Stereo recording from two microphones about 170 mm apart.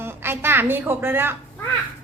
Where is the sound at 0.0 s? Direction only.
15° right (ahead or behind).